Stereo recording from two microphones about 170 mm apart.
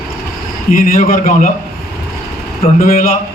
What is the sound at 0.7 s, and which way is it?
Speech, 55° left (ahead or behind).